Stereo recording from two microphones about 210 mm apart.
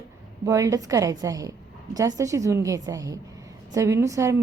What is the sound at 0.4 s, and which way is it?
A woman's voice, 15° right (ahead or behind).